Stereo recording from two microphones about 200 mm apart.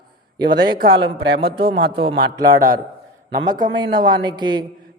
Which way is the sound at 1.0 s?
55° right (ahead or behind).